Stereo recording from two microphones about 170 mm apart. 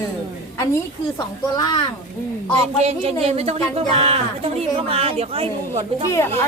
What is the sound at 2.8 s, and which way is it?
Speech, 35° right (ahead or behind).